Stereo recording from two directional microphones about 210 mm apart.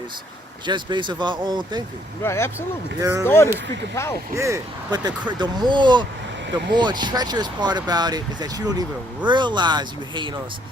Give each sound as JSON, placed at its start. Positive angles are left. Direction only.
{"t": 0.6, "sound": "speech", "side_deg": -20}
{"t": 2.2, "sound": "speech", "side_deg": 10}
{"t": 3.0, "sound": "speech", "side_deg": -15}
{"t": 3.2, "sound": "speech", "side_deg": 10}
{"t": 4.4, "sound": "speech", "side_deg": -15}